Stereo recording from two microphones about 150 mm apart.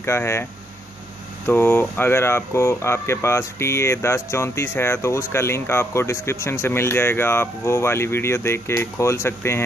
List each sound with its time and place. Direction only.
0.0 s speech: 15° left (ahead or behind)